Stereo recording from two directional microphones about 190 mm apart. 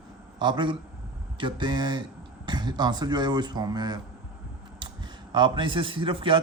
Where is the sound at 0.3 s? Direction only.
25° right (ahead or behind).